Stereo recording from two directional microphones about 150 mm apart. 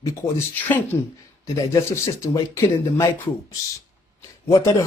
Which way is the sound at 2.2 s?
20° left (ahead or behind).